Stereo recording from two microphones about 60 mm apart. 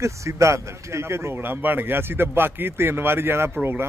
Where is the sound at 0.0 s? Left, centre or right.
Right.